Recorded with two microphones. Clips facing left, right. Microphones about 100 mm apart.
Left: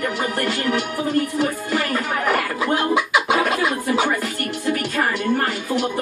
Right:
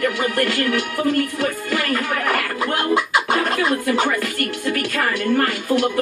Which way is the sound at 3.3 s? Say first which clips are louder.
Right 1 dB; 15° left (ahead or behind).